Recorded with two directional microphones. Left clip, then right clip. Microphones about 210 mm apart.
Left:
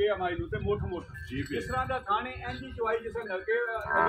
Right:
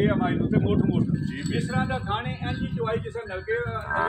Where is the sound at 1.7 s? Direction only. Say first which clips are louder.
Even; 40° right (ahead or behind).